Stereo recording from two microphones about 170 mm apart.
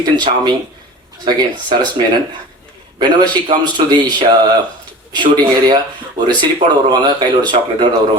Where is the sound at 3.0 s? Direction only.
25° right (ahead or behind).